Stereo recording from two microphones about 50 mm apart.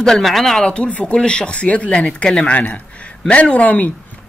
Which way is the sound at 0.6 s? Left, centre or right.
Left.